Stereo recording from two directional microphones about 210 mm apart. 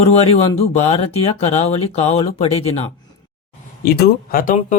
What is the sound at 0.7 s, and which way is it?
Speech, 30° left (ahead or behind).